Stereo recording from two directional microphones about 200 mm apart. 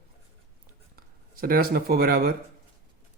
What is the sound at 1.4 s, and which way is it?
Speech, 45° right (ahead or behind).